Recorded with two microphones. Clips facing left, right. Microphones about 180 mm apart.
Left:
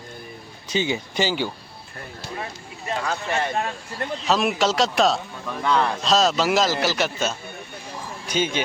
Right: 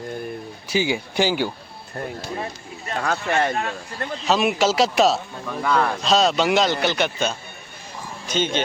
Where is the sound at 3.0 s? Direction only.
55° right (ahead or behind).